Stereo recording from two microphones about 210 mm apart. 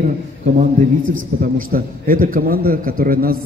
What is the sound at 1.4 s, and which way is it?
A man's voice, 45° right (ahead or behind).